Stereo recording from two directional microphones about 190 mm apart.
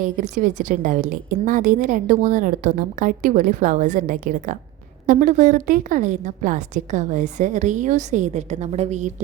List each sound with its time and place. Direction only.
0.0 s a woman's voice: 40° right (ahead or behind)